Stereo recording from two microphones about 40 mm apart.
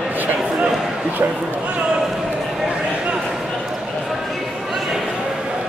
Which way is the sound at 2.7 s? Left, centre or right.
Right.